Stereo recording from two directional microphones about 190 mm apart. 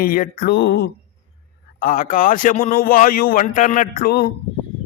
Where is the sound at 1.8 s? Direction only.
45° left (ahead or behind).